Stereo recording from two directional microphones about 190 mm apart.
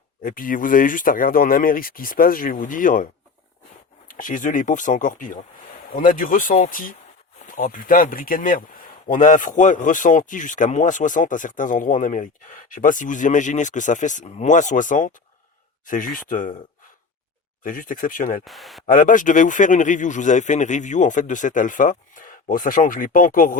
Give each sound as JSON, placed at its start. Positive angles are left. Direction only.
{"t": 0.2, "sound": "speech", "side_deg": 45}
{"t": 4.2, "sound": "speech", "side_deg": 45}
{"t": 17.6, "sound": "speech", "side_deg": 45}
{"t": 18.4, "sound": "speech", "side_deg": 0}
{"t": 18.9, "sound": "a man's voice", "side_deg": 45}